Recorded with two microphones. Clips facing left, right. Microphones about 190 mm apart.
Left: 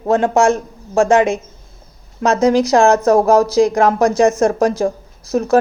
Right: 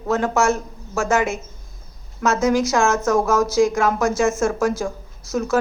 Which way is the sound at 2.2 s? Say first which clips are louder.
Left 5 dB; 35° left (ahead or behind).